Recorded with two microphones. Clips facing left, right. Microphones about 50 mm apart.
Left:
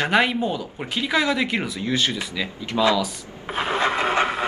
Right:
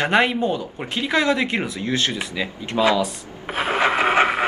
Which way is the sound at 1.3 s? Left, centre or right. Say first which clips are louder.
Right 2 dB; right.